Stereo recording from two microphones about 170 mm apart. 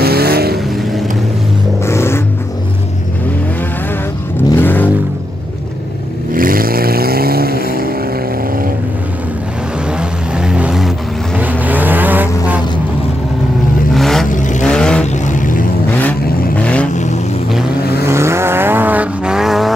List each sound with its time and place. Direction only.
0.0 s vehicle: 65° right (ahead or behind)
1.9 s vehicle: 15° left (ahead or behind)
4.6 s vehicle: 10° left (ahead or behind)
6.3 s vehicle: 55° right (ahead or behind)
9.9 s vehicle: 5° right (ahead or behind)
13.9 s vehicle: centre (ahead or behind)
14.3 s vehicle: 50° left (ahead or behind)
14.6 s vehicle: 5° left (ahead or behind)
15.2 s vehicle: 50° left (ahead or behind)
16.0 s vehicle: 10° left (ahead or behind)
16.9 s vehicle: 45° left (ahead or behind)
18.0 s vehicle: 15° right (ahead or behind)